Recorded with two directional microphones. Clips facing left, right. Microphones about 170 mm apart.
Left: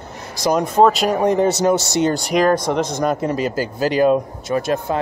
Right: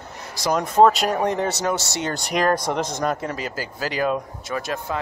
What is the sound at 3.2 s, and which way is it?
Speech, 30° left (ahead or behind).